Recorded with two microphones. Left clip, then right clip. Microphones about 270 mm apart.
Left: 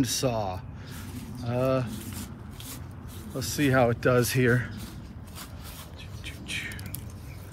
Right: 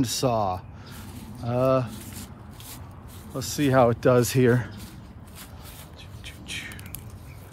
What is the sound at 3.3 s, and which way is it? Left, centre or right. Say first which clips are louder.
Speech: right 3 dB; centre.